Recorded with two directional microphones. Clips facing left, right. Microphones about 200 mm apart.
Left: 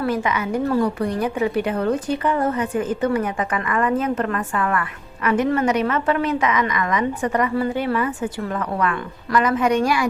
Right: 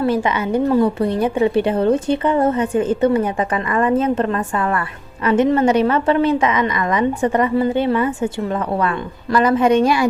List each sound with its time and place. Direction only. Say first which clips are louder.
0.0 s a woman's voice: right 4 dB; 30° right (ahead or behind)